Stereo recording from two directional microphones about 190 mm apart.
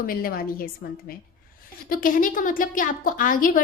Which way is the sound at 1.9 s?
45° left (ahead or behind).